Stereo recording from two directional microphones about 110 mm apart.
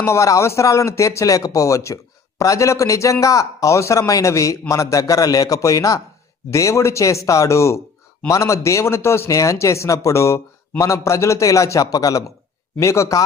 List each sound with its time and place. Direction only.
0.0 s a man's voice: 25° left (ahead or behind)